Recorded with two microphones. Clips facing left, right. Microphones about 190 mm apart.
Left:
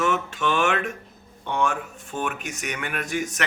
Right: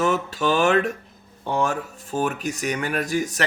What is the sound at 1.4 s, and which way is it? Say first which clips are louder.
Speech: right 2 dB; 35° right (ahead or behind).